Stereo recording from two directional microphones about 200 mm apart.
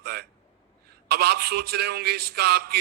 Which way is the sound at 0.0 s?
50° right (ahead or behind).